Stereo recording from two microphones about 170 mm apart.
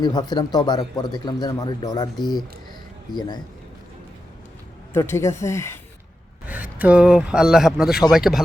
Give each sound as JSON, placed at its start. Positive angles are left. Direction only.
{"t": 0.0, "sound": "a man's voice", "side_deg": 25}
{"t": 3.2, "sound": "a man's voice", "side_deg": 25}
{"t": 4.9, "sound": "speech", "side_deg": 15}
{"t": 6.5, "sound": "speech", "side_deg": -10}